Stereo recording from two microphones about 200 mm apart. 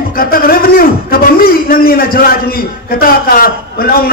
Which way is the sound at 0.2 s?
45° left (ahead or behind).